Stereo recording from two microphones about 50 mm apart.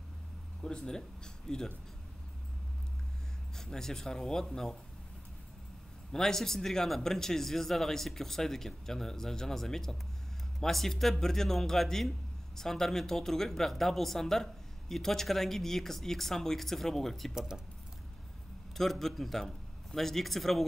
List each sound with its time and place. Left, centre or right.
0.6 s speech: centre
3.5 s speech: centre
6.1 s speech: centre
17.3 s speech: centre
18.8 s a man's voice: centre